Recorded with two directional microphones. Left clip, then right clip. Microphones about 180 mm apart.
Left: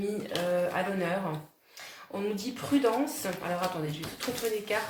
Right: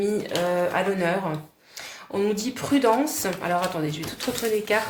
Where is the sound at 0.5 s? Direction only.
45° right (ahead or behind).